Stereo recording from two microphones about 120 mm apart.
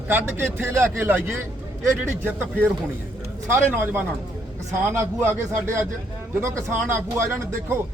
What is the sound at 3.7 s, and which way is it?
A man's voice, 15° right (ahead or behind).